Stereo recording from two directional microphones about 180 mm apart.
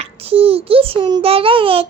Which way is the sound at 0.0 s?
35° right (ahead or behind).